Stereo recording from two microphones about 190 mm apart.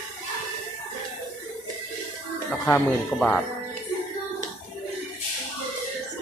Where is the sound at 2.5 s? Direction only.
10° left (ahead or behind).